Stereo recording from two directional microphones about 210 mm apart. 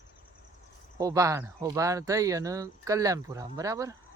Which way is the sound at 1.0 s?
15° right (ahead or behind).